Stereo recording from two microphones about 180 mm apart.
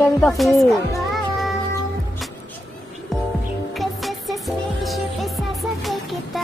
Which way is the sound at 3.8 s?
Centre (ahead or behind).